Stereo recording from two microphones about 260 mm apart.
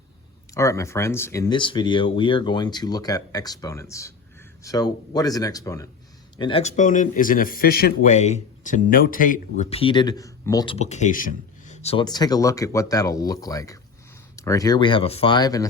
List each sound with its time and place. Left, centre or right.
0.5 s speech: centre
10.8 s speech: left